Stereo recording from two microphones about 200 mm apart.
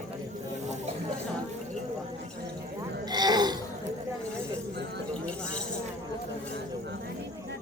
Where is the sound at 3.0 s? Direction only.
20° right (ahead or behind).